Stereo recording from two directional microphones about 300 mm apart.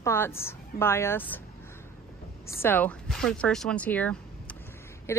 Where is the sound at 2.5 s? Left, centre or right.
Centre.